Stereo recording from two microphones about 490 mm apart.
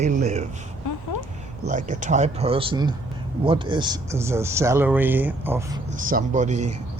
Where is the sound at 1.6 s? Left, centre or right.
Centre.